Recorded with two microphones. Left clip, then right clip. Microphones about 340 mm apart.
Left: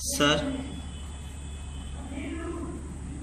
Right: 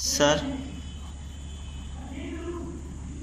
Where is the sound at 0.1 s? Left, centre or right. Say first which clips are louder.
Right 1 dB; centre.